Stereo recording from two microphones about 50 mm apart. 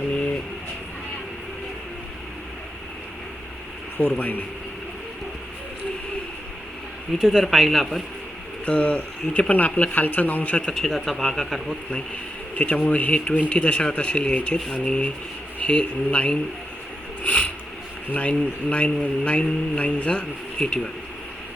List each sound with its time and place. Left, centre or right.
3.9 s speech: left
7.2 s speech: centre
8.6 s speech: left
10.7 s speech: centre
12.5 s speech: left
17.2 s a sound: left
18.1 s speech: left